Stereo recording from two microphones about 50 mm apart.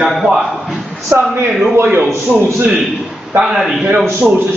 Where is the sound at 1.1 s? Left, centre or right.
Right.